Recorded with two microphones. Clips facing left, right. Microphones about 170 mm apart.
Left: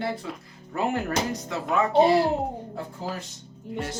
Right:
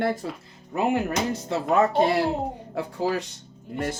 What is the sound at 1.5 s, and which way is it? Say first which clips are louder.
Speech: right 5 dB; 40° right (ahead or behind).